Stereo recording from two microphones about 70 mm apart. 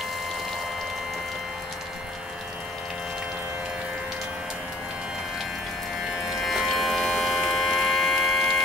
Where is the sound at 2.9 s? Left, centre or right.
Centre.